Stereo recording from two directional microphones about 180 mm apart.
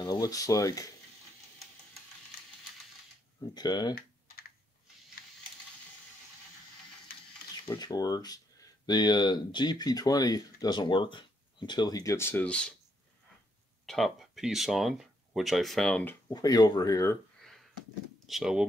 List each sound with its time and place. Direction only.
0.0 s speech: 20° left (ahead or behind)
3.3 s speech: 25° left (ahead or behind)
7.6 s speech: 20° left (ahead or behind); by 12.7 s 5° left (ahead or behind)
13.8 s speech: centre (ahead or behind)
16.3 s speech: 20° left (ahead or behind)
17.4 s a sound: centre (ahead or behind)
18.2 s speech: centre (ahead or behind)